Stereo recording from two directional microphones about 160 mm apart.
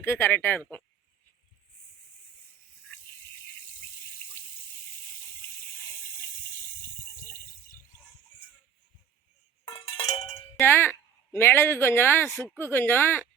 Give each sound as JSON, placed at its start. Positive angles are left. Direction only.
{"t": 0.0, "sound": "speech", "side_deg": 15}
{"t": 9.6, "sound": "cowbell", "side_deg": 30}
{"t": 10.6, "sound": "speech", "side_deg": 15}